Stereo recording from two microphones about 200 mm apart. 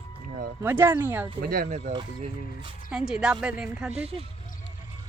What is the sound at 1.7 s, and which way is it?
Speech, 30° right (ahead or behind).